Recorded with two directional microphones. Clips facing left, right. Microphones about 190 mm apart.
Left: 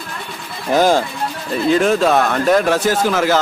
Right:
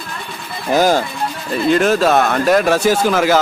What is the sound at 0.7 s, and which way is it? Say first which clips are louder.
Speech: even; 5° right (ahead or behind).